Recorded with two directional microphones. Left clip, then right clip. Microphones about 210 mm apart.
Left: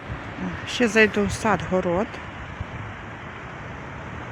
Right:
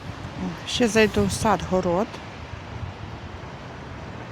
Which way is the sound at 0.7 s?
5° right (ahead or behind).